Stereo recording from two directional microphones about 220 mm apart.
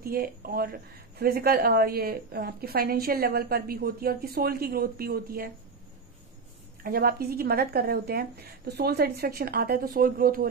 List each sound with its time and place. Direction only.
0.0 s a woman's voice: 40° right (ahead or behind)
6.8 s a woman's voice: 45° right (ahead or behind)